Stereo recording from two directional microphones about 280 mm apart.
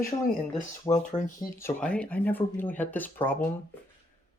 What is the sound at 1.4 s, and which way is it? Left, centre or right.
Speech, centre.